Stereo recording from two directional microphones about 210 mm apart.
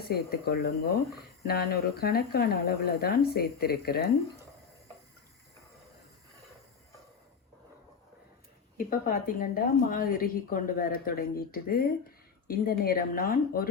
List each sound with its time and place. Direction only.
0.1 s a woman's voice: 50° left (ahead or behind)
8.8 s a woman's voice: 40° left (ahead or behind)